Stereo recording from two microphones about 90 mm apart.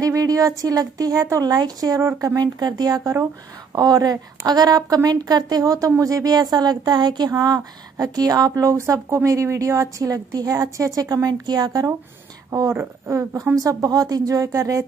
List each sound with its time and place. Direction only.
0.0 s a woman's voice: 40° right (ahead or behind)
2.0 s a woman's voice: 35° right (ahead or behind)
2.4 s a woman's voice: 45° right (ahead or behind)
12.7 s a woman's voice: 25° right (ahead or behind)
13.6 s a woman's voice: 40° right (ahead or behind)